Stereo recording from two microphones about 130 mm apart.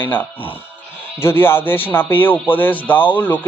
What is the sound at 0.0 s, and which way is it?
Speech, 15° left (ahead or behind).